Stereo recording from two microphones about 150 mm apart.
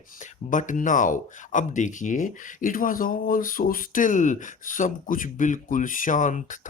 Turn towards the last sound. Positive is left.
turn(degrees=60)  # may be behind; listen again after turning